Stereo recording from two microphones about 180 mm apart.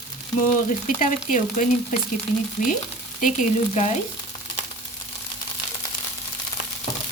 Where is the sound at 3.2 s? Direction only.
45° left (ahead or behind).